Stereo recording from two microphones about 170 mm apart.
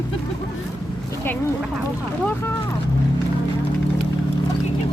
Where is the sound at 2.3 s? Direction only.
15° left (ahead or behind).